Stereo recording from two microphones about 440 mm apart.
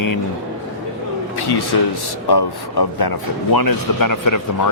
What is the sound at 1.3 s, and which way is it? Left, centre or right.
Speech, left.